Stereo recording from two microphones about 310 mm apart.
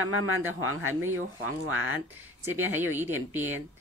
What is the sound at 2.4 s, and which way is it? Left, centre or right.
Speech, centre.